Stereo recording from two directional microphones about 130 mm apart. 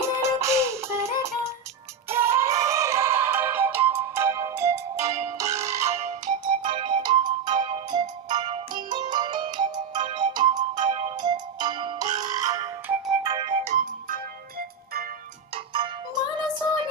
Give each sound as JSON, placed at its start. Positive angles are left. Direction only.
{"t": 0.0, "sound": "music", "side_deg": -20}
{"t": 5.9, "sound": "music", "side_deg": -60}
{"t": 6.4, "sound": "music", "side_deg": -40}
{"t": 13.2, "sound": "music", "side_deg": -40}
{"t": 13.7, "sound": "music", "side_deg": -90}
{"t": 15.5, "sound": "music", "side_deg": -40}